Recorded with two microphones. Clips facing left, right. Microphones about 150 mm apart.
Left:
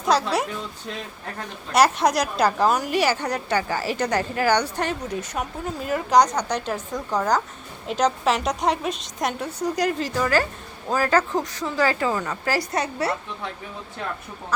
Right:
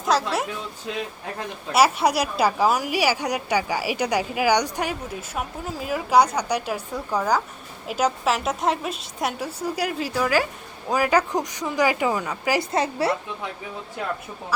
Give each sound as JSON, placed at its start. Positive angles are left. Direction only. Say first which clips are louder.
{"t": 0.0, "sound": "a woman's voice", "louder": "left 1 dB", "side_deg": 0}
{"t": 12.5, "sound": "a woman's voice", "louder": "right 3 dB", "side_deg": -25}